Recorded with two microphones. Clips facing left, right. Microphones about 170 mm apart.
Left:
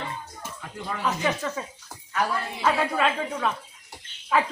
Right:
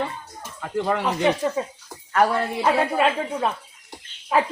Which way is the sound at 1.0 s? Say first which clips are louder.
Right 5 dB; 35° right (ahead or behind).